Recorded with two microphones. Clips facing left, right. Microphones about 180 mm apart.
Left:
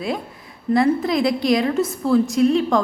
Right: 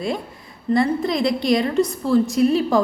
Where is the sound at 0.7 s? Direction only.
Centre (ahead or behind).